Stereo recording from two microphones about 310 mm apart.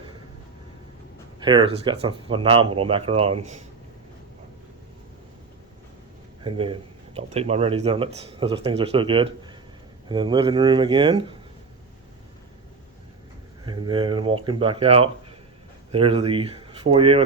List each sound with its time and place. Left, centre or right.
1.4 s speech: centre
6.4 s speech: centre
13.7 s speech: centre